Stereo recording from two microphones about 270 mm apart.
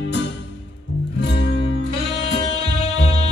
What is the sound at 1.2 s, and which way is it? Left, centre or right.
Music, left.